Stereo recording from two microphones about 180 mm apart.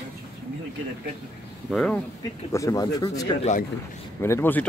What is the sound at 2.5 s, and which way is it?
Speech, 20° left (ahead or behind).